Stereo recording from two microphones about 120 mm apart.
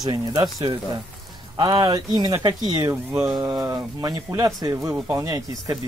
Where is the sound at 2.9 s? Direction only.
15° right (ahead or behind).